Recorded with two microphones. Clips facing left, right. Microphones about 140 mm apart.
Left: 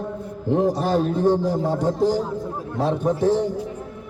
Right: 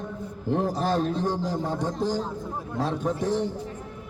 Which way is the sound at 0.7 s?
10° left (ahead or behind).